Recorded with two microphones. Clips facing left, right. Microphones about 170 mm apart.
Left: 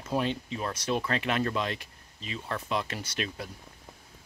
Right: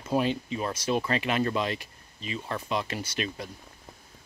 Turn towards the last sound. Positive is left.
turn(degrees=0)  # may be behind; listen again after turning